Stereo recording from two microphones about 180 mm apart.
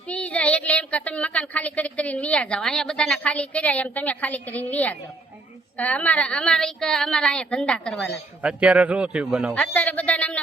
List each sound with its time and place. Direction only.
0.1 s a woman's voice: 5° left (ahead or behind)
8.4 s a man's voice: 5° right (ahead or behind)
9.6 s speech: 10° left (ahead or behind)